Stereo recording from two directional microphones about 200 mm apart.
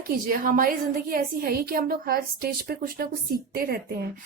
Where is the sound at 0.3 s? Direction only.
45° right (ahead or behind).